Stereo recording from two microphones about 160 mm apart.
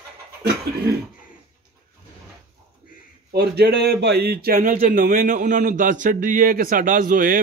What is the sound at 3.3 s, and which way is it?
Speech, 90° right.